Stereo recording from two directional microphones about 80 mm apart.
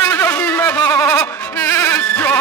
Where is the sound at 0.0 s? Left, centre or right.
Left.